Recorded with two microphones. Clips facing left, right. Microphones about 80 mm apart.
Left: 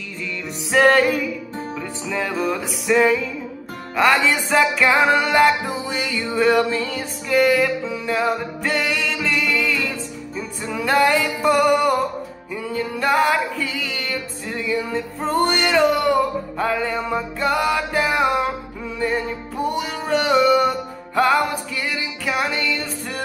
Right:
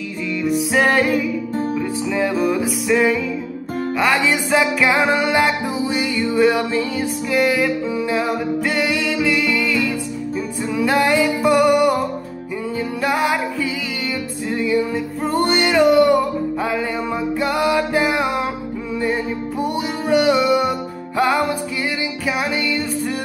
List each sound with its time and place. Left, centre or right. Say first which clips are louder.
0.4 s music: even; centre
4.2 s music: right 1 dB; centre
22.2 s music: even; centre